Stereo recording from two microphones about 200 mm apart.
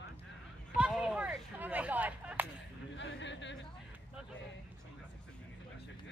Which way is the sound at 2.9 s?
65° left (ahead or behind).